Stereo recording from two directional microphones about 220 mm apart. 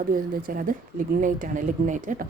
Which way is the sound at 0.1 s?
40° right (ahead or behind).